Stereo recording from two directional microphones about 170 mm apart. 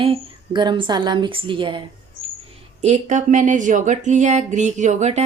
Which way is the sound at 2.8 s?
45° right (ahead or behind).